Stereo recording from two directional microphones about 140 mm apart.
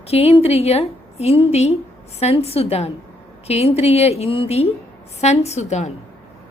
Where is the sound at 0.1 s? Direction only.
45° left (ahead or behind).